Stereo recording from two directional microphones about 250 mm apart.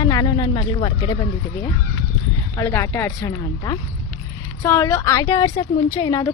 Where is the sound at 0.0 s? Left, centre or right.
Centre.